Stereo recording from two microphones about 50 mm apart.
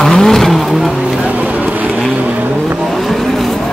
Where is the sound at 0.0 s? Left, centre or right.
Centre.